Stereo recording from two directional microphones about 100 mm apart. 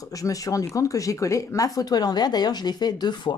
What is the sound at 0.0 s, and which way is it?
Speech, 35° left (ahead or behind).